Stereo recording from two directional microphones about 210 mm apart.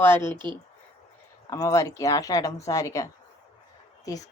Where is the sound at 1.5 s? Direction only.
15° left (ahead or behind).